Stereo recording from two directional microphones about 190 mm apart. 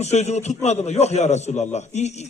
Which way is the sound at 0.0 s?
35° left (ahead or behind).